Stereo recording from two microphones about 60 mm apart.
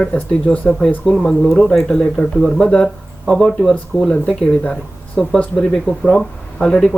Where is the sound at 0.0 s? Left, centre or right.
Centre.